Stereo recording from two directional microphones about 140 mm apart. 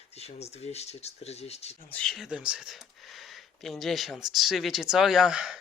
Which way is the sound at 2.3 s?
5° right (ahead or behind).